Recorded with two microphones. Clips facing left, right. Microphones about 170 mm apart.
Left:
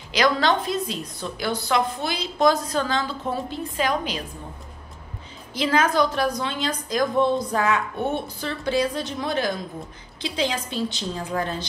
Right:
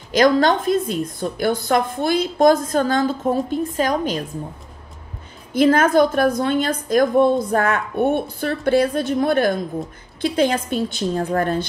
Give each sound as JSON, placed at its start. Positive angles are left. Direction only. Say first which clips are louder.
{"t": 0.1, "sound": "a woman's voice", "louder": "right 6 dB", "side_deg": -50}
{"t": 5.5, "sound": "a woman's voice", "louder": "right 7 dB", "side_deg": -50}